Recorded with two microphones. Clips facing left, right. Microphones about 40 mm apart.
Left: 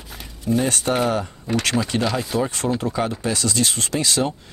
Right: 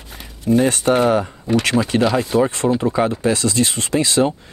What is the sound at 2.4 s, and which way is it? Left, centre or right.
Speech, right.